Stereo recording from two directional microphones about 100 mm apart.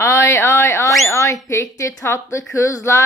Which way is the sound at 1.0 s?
30° left (ahead or behind).